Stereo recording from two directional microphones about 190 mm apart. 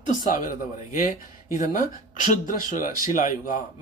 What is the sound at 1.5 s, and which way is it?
Speech, 45° left (ahead or behind).